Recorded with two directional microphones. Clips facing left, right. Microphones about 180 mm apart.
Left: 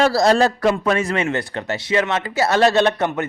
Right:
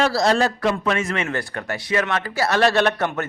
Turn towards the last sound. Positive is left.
turn(degrees=15)  # may be behind; listen again after turning